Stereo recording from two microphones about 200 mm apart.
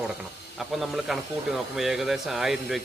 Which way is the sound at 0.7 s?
Centre (ahead or behind).